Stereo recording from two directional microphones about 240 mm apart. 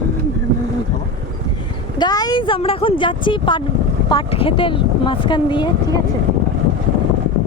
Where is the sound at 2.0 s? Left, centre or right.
Centre.